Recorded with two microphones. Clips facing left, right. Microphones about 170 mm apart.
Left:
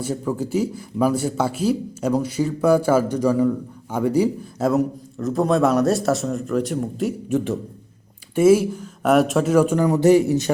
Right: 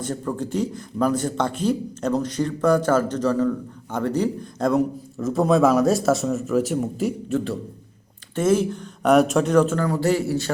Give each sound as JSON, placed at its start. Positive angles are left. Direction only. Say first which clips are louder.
{"t": 0.0, "sound": "speech", "louder": "left 2 dB", "side_deg": 5}
{"t": 7.3, "sound": "speech", "louder": "left 2 dB", "side_deg": 15}